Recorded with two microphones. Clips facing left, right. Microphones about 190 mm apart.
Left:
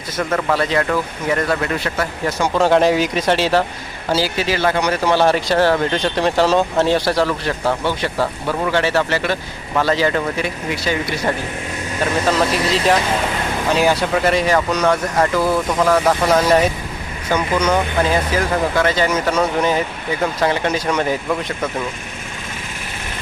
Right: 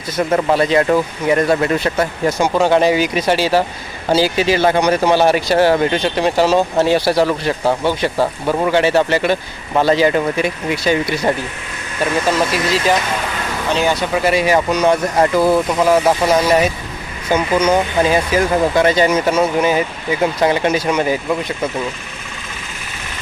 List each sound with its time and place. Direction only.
0.2 s speech: 25° right (ahead or behind)
2.4 s speech: centre (ahead or behind)
4.1 s speech: 15° right (ahead or behind)
12.3 s speech: centre (ahead or behind)
15.1 s speech: 25° right (ahead or behind); by 21.3 s 5° right (ahead or behind)